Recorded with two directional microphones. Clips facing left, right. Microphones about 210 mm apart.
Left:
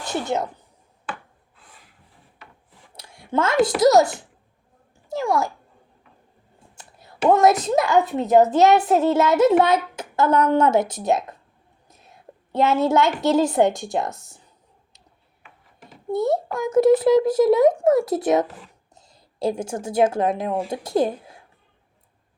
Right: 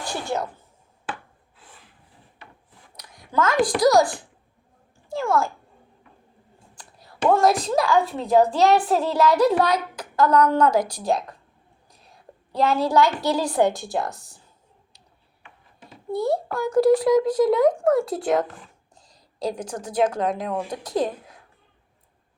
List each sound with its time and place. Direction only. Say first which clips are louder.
0.0 s a woman's voice: left 3 dB; 20° left (ahead or behind)
2.9 s speech: left 2 dB; 30° left (ahead or behind)
6.7 s a sound: left 2 dB; 25° left (ahead or behind)
7.3 s a child's voice: left 2 dB; 20° left (ahead or behind)
12.0 s whispering: left 2 dB; 25° left (ahead or behind)
12.7 s a child's voice: even; 25° left (ahead or behind)
14.1 s speech: left 2 dB; centre (ahead or behind)
16.0 s a child's voice: left 2 dB; 20° left (ahead or behind)